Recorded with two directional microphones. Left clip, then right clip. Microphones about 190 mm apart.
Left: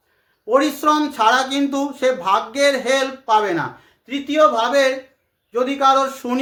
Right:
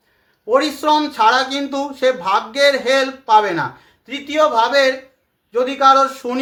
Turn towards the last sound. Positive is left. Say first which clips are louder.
# right 4 dB
turn(degrees=15)  # may be behind; listen again after turning